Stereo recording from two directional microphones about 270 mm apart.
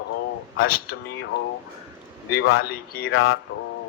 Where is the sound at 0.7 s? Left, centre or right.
Left.